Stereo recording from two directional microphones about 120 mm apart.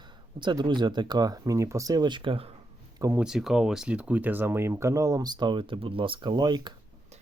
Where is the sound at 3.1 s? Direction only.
5° right (ahead or behind); by 6.7 s 35° right (ahead or behind).